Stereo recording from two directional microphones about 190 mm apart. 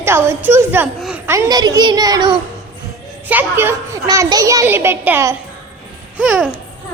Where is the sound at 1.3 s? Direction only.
20° right (ahead or behind).